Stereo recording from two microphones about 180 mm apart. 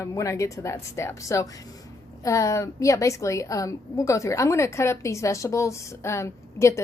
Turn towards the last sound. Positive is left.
turn(degrees=15)  # may be behind; listen again after turning